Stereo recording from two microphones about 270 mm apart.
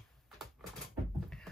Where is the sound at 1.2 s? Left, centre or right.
Centre.